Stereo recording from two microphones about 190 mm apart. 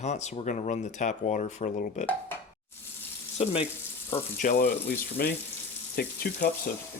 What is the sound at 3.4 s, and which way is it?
Speech, 30° left (ahead or behind).